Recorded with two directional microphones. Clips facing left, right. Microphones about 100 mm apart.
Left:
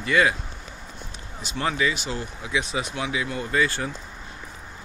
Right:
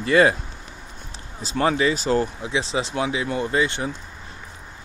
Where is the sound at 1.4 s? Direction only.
35° right (ahead or behind).